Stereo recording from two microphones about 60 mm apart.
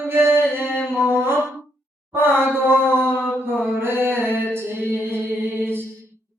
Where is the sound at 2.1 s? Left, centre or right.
Right.